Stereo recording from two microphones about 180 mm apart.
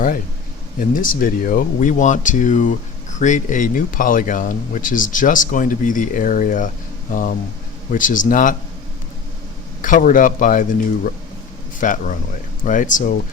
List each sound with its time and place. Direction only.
0.8 s speech: 50° left (ahead or behind)
9.8 s speech: 45° left (ahead or behind)